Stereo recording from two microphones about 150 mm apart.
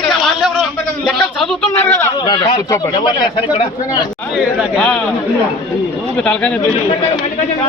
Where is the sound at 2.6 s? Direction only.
25° left (ahead or behind).